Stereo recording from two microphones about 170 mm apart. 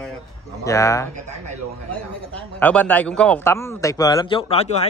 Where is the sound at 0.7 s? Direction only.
20° left (ahead or behind).